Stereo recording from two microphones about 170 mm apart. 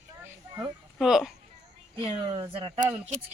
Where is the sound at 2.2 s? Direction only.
30° right (ahead or behind).